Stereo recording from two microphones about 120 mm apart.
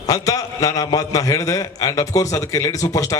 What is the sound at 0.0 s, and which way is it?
A man's voice, 30° left (ahead or behind).